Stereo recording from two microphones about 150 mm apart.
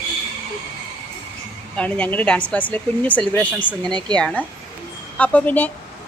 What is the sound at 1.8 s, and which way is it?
Speech, 10° left (ahead or behind).